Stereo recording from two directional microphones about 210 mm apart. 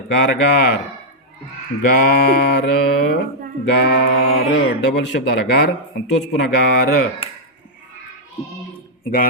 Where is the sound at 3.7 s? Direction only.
55° left (ahead or behind).